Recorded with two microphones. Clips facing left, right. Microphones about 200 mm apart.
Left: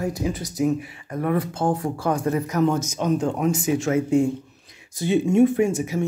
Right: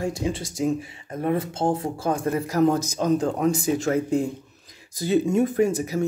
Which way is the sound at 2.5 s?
35° right (ahead or behind).